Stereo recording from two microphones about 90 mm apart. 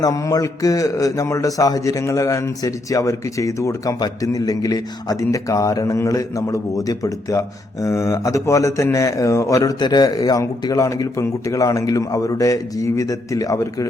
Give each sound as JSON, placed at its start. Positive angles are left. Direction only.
{"t": 0.0, "sound": "a man's voice", "side_deg": 40}
{"t": 9.8, "sound": "a man's voice", "side_deg": 50}